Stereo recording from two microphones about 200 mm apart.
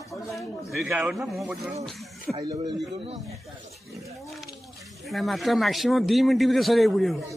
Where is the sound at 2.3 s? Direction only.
20° right (ahead or behind).